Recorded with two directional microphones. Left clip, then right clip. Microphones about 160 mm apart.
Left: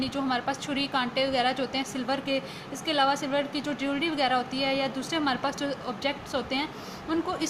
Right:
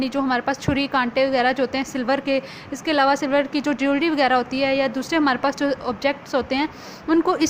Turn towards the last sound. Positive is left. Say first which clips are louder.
# right 10 dB
turn(degrees=-55)  # may be behind; listen again after turning